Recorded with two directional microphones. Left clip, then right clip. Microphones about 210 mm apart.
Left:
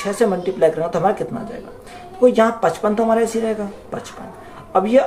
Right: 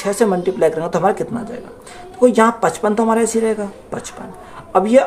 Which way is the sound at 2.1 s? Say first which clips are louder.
Right 1 dB; 40° right (ahead or behind).